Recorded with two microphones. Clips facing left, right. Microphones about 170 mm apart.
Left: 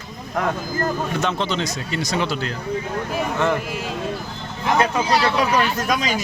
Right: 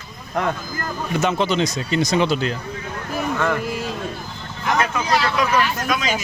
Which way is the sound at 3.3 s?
20° left (ahead or behind).